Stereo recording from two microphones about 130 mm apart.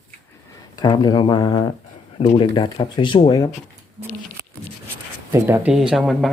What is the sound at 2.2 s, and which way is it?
Speech, 45° left (ahead or behind).